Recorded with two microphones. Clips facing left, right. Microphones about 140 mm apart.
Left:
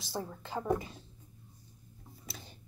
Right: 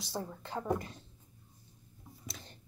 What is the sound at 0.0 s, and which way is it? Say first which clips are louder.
Speech: left 1 dB; centre (ahead or behind).